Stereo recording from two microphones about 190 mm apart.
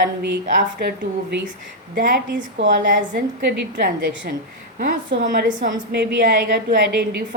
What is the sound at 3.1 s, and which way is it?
A woman's voice, 60° right (ahead or behind).